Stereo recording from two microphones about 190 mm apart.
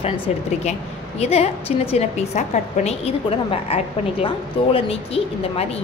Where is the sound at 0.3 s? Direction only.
35° left (ahead or behind).